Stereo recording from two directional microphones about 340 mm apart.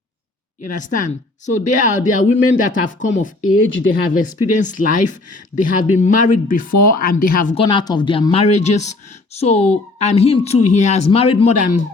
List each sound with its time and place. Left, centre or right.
0.6 s speech: left
3.4 s speech: left
4.4 s speech: left
6.7 s speech: left
7.3 s speech: left